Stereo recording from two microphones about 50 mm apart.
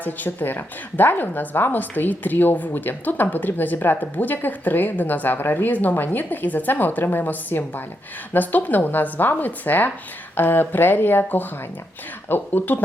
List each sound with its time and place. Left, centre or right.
0.0 s a woman's voice: left